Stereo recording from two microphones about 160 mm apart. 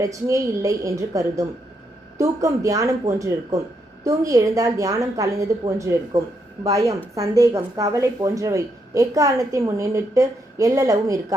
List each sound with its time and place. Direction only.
0.0 s a woman's voice: 20° right (ahead or behind)